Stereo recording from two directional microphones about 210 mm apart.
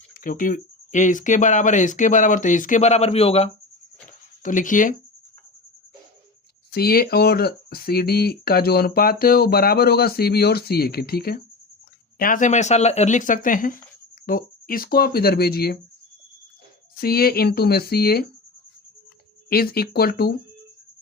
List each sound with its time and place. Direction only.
0.1 s speech: 40° left (ahead or behind)
6.7 s speech: 45° left (ahead or behind)
17.0 s speech: 45° left (ahead or behind)
19.5 s speech: 45° left (ahead or behind)